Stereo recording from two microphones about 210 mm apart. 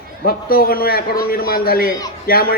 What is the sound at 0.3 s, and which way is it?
A man's voice, 45° left (ahead or behind).